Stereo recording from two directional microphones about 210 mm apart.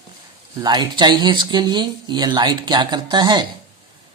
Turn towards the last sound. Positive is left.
turn(degrees=-20)  # may be behind; listen again after turning